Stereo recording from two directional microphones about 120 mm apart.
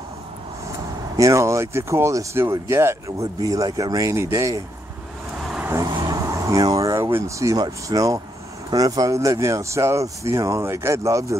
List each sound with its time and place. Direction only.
1.1 s speech: 25° right (ahead or behind)
5.6 s vehicle: 25° right (ahead or behind)
6.0 s speech: 25° right (ahead or behind)